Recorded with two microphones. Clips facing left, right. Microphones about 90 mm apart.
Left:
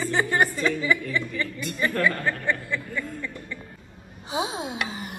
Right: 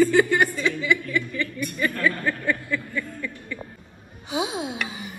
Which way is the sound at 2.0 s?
20° left (ahead or behind).